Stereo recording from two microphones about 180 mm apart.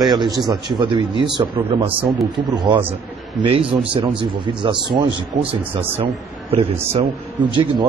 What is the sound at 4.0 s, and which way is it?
A man's voice, 30° right (ahead or behind).